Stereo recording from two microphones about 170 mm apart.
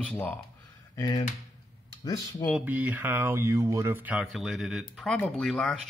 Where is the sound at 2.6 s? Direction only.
10° right (ahead or behind).